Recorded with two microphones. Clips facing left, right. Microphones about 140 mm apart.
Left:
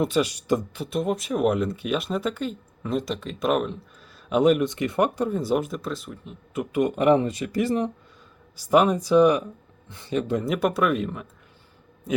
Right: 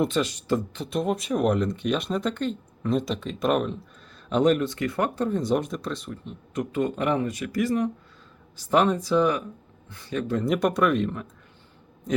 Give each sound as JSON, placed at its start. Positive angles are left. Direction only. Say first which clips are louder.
{"t": 0.0, "sound": "speech", "louder": "left 1 dB", "side_deg": 10}
{"t": 8.5, "sound": "speech", "louder": "left 2 dB", "side_deg": 10}
{"t": 10.4, "sound": "speech", "louder": "right 4 dB", "side_deg": 0}